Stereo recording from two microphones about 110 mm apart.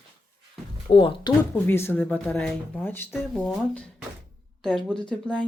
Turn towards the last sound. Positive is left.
turn(degrees=10)  # may be behind; listen again after turning